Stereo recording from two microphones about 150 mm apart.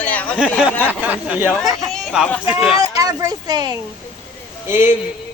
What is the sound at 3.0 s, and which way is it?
Speech, 25° right (ahead or behind).